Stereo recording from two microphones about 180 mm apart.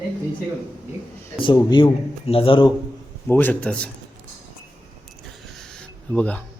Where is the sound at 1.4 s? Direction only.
25° left (ahead or behind).